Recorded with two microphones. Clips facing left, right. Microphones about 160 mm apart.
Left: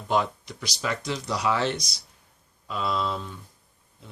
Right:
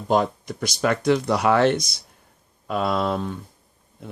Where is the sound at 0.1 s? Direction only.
45° right (ahead or behind).